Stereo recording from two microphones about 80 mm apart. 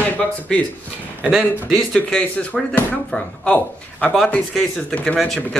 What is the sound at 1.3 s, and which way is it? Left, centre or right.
Speech, centre.